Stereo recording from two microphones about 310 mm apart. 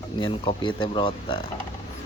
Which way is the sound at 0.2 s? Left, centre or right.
Centre.